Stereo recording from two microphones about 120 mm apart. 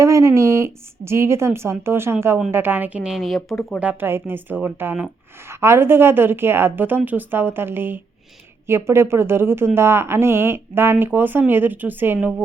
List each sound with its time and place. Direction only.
0.0 s a woman's voice: 25° right (ahead or behind); by 3.6 s centre (ahead or behind)
3.8 s a woman's voice: 15° right (ahead or behind)